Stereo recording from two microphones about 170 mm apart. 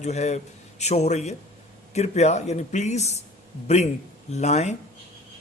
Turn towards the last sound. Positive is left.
turn(degrees=40)  # may be behind; listen again after turning